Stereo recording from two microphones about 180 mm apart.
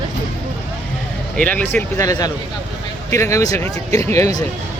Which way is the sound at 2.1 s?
20° left (ahead or behind).